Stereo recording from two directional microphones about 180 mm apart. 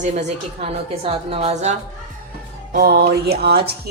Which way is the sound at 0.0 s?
40° right (ahead or behind).